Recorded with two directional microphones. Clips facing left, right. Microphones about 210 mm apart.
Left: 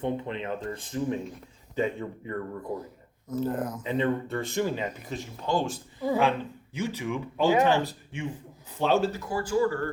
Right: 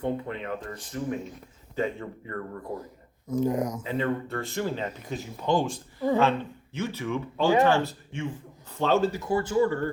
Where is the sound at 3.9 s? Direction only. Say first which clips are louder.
Left 2 dB; 20° left (ahead or behind).